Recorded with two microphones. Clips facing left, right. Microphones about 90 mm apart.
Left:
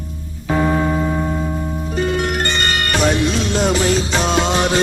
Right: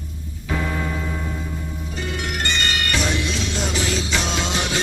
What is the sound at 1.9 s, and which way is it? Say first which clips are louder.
Music: left 9 dB; 45° left (ahead or behind).